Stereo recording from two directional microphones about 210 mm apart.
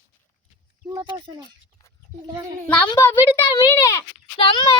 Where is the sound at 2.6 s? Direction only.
5° left (ahead or behind).